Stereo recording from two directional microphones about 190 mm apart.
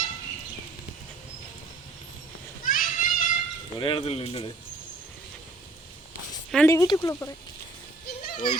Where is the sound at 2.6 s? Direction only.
45° left (ahead or behind).